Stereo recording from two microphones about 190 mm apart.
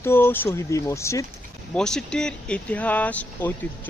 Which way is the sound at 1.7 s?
5° left (ahead or behind).